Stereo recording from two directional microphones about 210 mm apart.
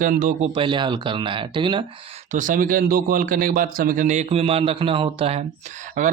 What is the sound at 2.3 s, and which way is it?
Speech, 40° right (ahead or behind).